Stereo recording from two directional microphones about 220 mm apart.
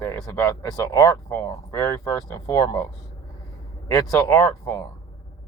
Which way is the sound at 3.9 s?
15° left (ahead or behind).